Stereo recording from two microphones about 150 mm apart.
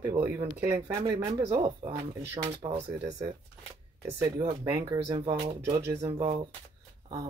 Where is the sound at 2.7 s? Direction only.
45° right (ahead or behind).